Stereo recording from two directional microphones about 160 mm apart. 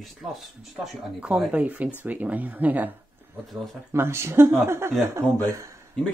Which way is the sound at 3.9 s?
15° right (ahead or behind).